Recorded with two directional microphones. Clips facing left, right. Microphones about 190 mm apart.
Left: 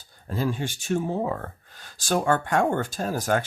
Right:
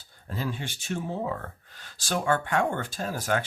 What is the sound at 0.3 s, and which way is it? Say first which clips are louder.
Speech: left 6 dB; 45° left (ahead or behind).